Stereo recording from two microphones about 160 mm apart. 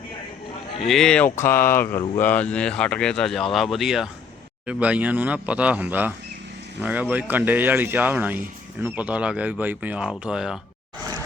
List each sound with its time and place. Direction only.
0.9 s speech: 5° left (ahead or behind)